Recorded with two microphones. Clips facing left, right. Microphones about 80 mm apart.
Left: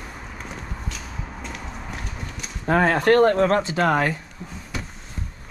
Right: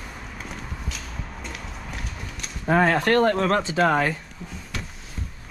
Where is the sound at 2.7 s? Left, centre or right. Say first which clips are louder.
Left 2 dB; left.